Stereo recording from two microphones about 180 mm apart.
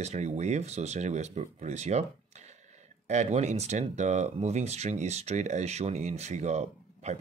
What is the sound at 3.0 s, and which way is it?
Speech, 40° right (ahead or behind).